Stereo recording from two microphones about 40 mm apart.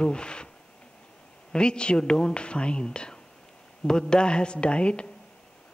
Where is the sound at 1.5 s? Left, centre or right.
Left.